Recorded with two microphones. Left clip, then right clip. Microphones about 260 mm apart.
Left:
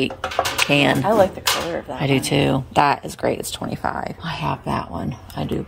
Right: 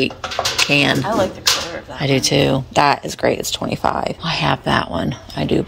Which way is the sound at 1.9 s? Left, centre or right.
Centre.